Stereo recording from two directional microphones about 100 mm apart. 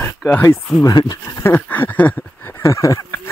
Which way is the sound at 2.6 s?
35° left (ahead or behind).